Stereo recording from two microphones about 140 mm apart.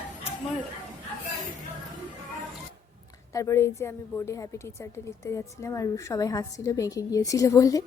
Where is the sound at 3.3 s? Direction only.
20° left (ahead or behind).